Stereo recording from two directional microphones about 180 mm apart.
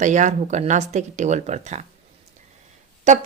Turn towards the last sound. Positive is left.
turn(degrees=-40)  # may be behind; listen again after turning